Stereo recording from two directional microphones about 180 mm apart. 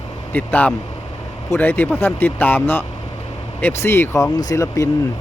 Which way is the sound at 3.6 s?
15° left (ahead or behind).